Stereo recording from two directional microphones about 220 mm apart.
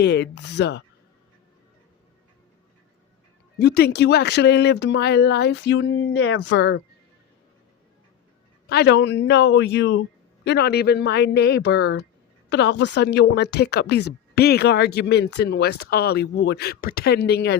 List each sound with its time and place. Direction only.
0.0 s speech: 50° left (ahead or behind)
3.6 s speech: 45° left (ahead or behind)
8.7 s speech: 50° left (ahead or behind)